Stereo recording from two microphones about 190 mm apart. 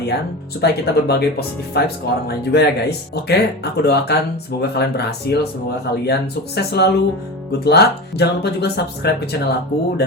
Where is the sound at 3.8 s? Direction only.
60° left (ahead or behind).